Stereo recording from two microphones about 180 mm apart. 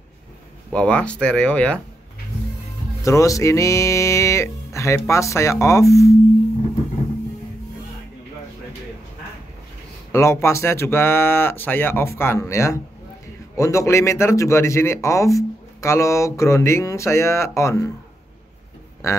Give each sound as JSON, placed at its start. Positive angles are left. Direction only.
{"t": 0.7, "sound": "speech", "side_deg": 5}
{"t": 3.0, "sound": "speech", "side_deg": 15}
{"t": 10.1, "sound": "speech", "side_deg": 15}